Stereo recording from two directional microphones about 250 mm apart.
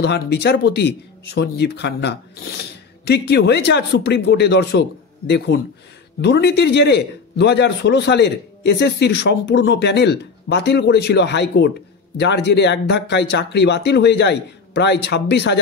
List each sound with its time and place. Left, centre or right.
0.0 s a man's voice: left